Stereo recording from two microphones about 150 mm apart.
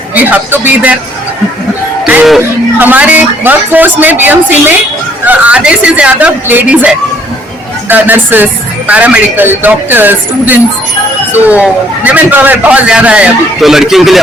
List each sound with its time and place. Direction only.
0.1 s a man's voice: 10° right (ahead or behind)
2.0 s music: 5° right (ahead or behind)
2.4 s a man's voice: 15° right (ahead or behind)